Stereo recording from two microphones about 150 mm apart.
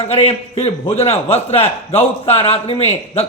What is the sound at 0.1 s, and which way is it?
A man's voice, 40° left (ahead or behind).